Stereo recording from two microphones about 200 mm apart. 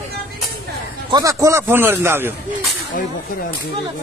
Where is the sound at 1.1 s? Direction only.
15° right (ahead or behind).